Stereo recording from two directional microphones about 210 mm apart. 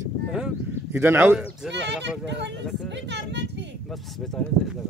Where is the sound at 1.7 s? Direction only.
55° right (ahead or behind).